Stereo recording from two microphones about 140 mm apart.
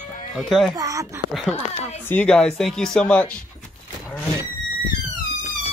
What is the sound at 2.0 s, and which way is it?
Speech, 10° left (ahead or behind).